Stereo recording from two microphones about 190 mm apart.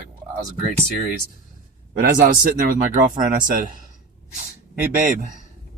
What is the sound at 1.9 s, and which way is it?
Speech, 50° right (ahead or behind).